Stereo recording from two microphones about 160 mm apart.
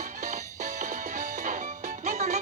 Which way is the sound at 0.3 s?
50° right (ahead or behind).